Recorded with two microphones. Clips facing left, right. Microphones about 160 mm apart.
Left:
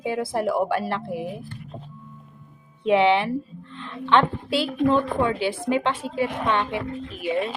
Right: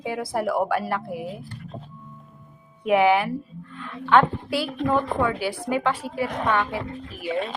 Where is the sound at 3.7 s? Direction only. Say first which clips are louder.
Right 1 dB; 25° left (ahead or behind).